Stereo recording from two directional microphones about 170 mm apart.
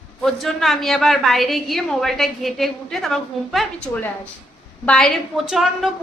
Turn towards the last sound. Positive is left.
turn(degrees=-5)  # may be behind; listen again after turning